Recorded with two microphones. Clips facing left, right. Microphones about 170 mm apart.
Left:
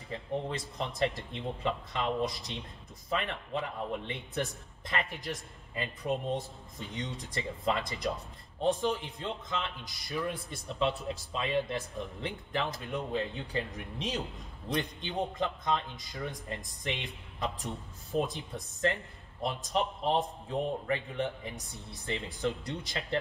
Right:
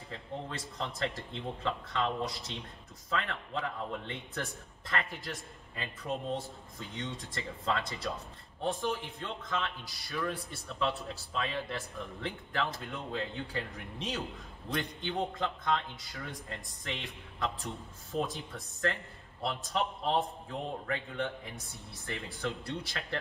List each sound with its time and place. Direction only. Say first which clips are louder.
0.5 s a man's voice: left 3 dB; 20° left (ahead or behind)
7.0 s a man's voice: left 2 dB; 15° left (ahead or behind)